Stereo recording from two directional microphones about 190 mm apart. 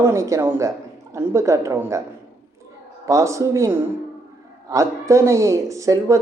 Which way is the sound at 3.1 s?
15° right (ahead or behind).